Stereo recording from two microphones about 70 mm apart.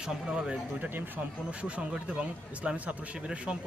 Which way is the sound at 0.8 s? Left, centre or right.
Right.